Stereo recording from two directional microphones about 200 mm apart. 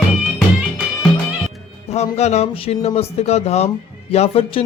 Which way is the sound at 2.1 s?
35° left (ahead or behind).